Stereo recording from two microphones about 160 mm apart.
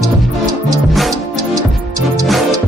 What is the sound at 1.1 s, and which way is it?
Music, 20° right (ahead or behind).